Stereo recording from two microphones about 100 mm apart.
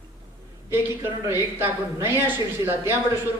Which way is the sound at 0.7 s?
25° right (ahead or behind).